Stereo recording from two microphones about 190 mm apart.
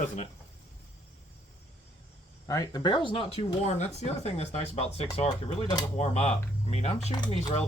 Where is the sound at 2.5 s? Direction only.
20° left (ahead or behind).